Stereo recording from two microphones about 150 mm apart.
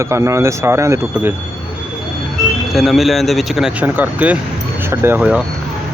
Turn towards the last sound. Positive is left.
turn(degrees=-10)  # may be behind; listen again after turning